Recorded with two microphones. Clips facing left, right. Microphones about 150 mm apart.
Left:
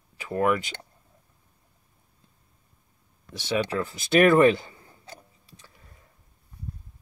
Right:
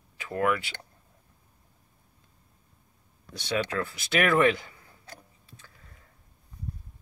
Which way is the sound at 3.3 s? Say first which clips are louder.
Left 3 dB; 25° left (ahead or behind).